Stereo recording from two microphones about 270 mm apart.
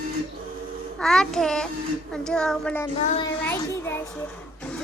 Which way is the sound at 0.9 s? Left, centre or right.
Centre.